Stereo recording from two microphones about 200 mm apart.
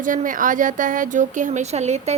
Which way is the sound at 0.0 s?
40° right (ahead or behind).